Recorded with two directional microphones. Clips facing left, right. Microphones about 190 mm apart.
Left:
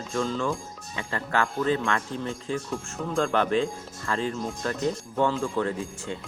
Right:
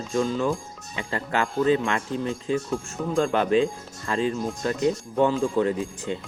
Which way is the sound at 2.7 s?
Centre (ahead or behind).